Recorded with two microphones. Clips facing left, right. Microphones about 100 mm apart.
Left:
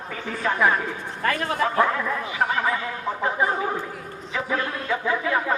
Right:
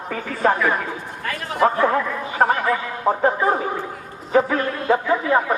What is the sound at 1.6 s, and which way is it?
Speech, 45° right (ahead or behind).